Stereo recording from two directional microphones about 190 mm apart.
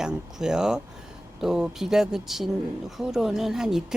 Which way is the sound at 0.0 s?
5° right (ahead or behind).